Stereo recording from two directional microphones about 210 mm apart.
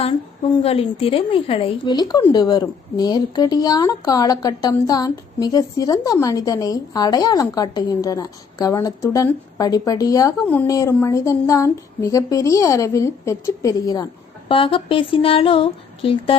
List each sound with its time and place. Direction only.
0.5 s speech: 25° left (ahead or behind)